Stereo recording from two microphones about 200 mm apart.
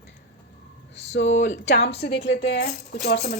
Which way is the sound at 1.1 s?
60° left (ahead or behind).